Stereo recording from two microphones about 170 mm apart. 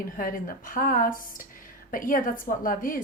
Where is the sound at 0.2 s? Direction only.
55° left (ahead or behind).